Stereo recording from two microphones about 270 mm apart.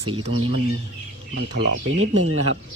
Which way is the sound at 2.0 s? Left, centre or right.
Right.